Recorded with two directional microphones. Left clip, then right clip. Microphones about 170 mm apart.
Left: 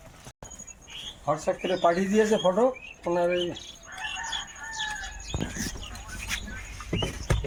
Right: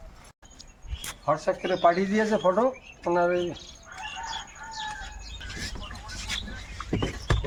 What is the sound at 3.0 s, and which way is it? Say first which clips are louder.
Speech: right 2 dB; 25° left (ahead or behind).